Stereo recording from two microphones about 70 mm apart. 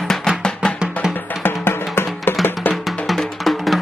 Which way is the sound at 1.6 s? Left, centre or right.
Left.